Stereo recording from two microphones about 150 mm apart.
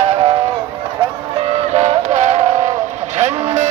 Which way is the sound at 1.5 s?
45° right (ahead or behind).